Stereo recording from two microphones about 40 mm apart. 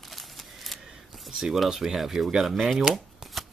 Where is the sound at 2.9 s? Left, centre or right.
Centre.